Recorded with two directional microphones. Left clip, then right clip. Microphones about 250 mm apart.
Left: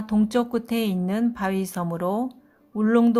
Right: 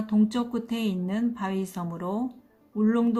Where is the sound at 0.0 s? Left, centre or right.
Left.